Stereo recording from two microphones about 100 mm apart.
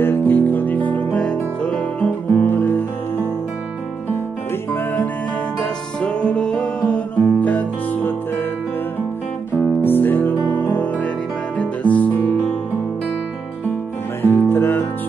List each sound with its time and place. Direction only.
0.0 s music: 20° left (ahead or behind)
5.6 s music: 10° left (ahead or behind)
9.8 s music: 20° left (ahead or behind)
11.5 s guitar: 15° left (ahead or behind)
14.2 s music: 20° left (ahead or behind)